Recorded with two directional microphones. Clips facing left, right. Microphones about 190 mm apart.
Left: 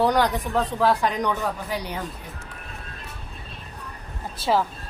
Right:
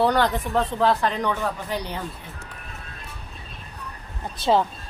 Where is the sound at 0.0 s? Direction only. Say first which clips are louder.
Even; 10° left (ahead or behind).